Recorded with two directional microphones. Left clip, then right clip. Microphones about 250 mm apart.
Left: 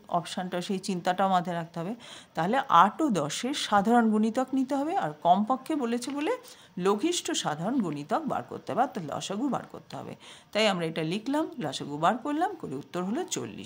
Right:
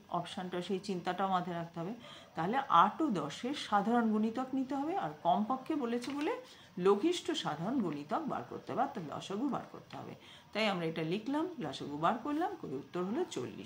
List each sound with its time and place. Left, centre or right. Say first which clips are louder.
0.1 s speech: left 8 dB; left